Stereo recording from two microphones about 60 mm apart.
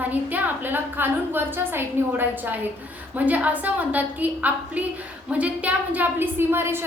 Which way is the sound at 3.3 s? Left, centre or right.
Right.